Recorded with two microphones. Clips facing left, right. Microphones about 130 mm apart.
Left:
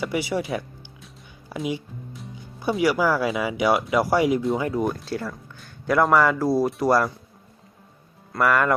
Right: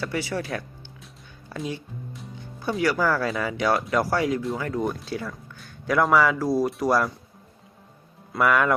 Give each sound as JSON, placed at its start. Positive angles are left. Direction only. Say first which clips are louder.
{"t": 0.0, "sound": "speech", "louder": "left 3 dB", "side_deg": 15}
{"t": 4.9, "sound": "speech", "louder": "left 2 dB", "side_deg": 0}
{"t": 8.3, "sound": "speech", "louder": "even", "side_deg": 0}